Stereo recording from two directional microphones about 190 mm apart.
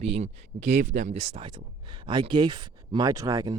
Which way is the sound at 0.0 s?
35° right (ahead or behind).